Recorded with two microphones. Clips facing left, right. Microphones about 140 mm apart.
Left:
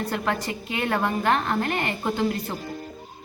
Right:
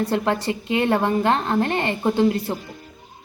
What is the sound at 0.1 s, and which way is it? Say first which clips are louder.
A woman's voice: right 5 dB; 25° right (ahead or behind).